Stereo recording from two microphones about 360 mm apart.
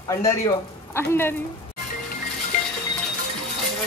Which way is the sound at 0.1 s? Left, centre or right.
Centre.